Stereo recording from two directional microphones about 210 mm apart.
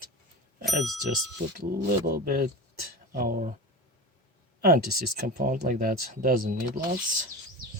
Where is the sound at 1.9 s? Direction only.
45° right (ahead or behind).